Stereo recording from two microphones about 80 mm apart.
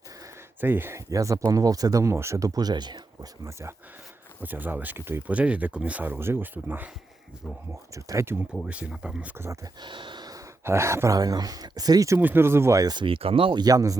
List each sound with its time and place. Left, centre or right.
0.6 s speech: right
0.9 s speech: right
3.4 s speech: right
4.4 s speech: right
5.3 s speech: centre
7.9 s speech: right
8.6 s speech: centre
9.8 s a sound: right
10.6 s speech: right
11.2 s speech: right
12.1 s speech: right
12.8 s speech: right
13.7 s speech: right